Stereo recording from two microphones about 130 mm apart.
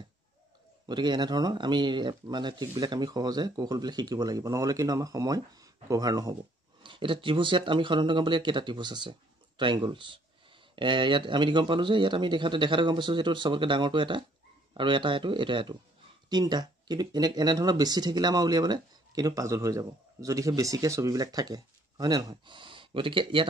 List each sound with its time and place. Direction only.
0.8 s speech: 35° right (ahead or behind)
6.8 s speech: 40° right (ahead or behind)